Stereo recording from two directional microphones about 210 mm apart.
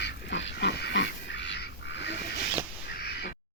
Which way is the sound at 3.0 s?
55° left (ahead or behind).